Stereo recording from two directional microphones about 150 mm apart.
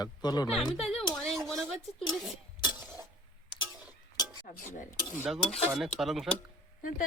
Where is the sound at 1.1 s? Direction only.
Centre (ahead or behind).